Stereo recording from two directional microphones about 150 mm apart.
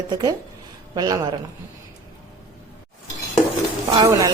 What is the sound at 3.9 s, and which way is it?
Speech, 25° right (ahead or behind).